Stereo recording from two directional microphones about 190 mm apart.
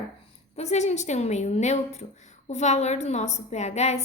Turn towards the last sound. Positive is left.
turn(degrees=35)  # may be behind; listen again after turning